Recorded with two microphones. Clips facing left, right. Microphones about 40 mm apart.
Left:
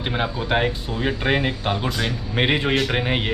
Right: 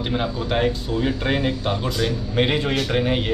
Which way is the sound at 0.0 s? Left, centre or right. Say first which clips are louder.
Even; left.